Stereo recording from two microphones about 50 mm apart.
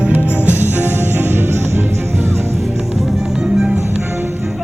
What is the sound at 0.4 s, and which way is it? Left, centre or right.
Music, right.